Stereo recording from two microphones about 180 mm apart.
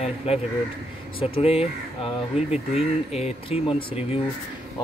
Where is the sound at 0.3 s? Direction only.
35° left (ahead or behind).